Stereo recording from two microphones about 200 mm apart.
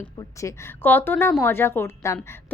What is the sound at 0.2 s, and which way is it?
A woman's voice, 15° left (ahead or behind).